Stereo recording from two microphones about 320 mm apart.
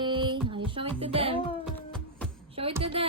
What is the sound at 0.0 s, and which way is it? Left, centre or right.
Music, centre.